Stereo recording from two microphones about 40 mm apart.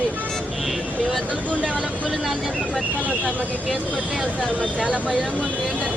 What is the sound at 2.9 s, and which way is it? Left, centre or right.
Speech, left.